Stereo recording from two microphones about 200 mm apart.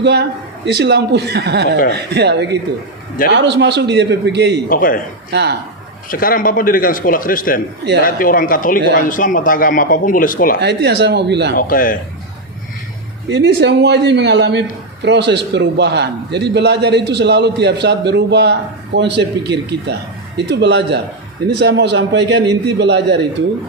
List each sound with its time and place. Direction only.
0.0 s a man's voice: 60° right (ahead or behind)
4.7 s speech: 45° left (ahead or behind)
5.3 s a man's voice: 55° right (ahead or behind)
6.1 s speech: 45° left (ahead or behind)
10.6 s a man's voice: 55° right (ahead or behind)
11.5 s speech: 45° left (ahead or behind)
13.2 s a man's voice: 60° right (ahead or behind)
20.3 s a man's voice: 55° right (ahead or behind)